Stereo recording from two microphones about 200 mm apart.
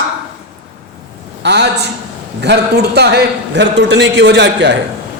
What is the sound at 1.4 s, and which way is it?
A man's voice, 60° right (ahead or behind).